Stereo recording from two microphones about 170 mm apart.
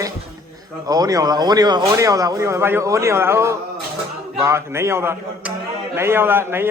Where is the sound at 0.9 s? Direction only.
20° right (ahead or behind).